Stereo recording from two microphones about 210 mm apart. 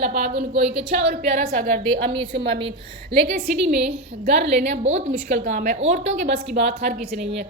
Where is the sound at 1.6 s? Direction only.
50° right (ahead or behind).